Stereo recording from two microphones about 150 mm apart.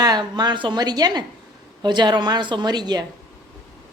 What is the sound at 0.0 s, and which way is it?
A woman's voice, 30° right (ahead or behind).